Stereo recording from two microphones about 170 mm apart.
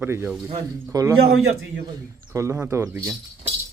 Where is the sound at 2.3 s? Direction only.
15° right (ahead or behind).